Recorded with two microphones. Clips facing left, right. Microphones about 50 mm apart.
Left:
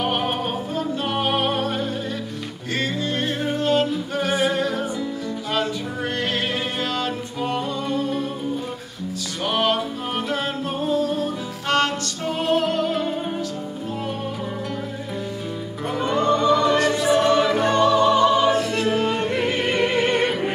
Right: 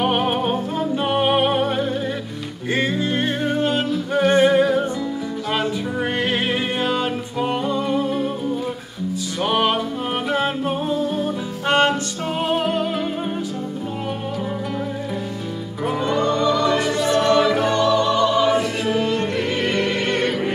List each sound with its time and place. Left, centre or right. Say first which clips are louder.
0.2 s music: right 4 dB; centre
3.5 s yodeling: left 3 dB; centre
4.4 s music: right 8 dB; centre
6.1 s music: right 2 dB; centre
9.4 s music: right 2 dB; centre
16.0 s music: left 1 dB; centre
16.9 s choir: even; centre
17.4 s music: right 1 dB; centre
17.8 s music: left 3 dB; centre
18.5 s choir: right 1 dB; centre
19.1 s music: even; centre